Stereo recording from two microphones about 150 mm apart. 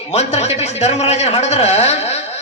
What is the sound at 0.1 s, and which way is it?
A man's voice, 45° left (ahead or behind).